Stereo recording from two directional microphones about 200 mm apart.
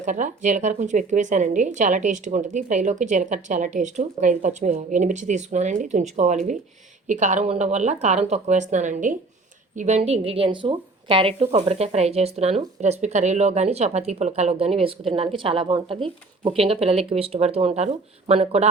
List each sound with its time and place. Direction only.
0.0 s a woman's voice: 40° right (ahead or behind)